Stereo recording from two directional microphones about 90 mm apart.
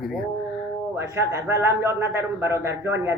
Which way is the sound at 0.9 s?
30° right (ahead or behind).